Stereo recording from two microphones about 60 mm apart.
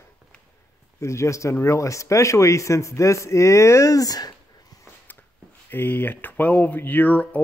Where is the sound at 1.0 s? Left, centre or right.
Left.